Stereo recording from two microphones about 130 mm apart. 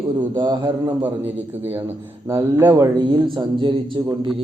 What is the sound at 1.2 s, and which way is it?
A man's voice, 15° right (ahead or behind).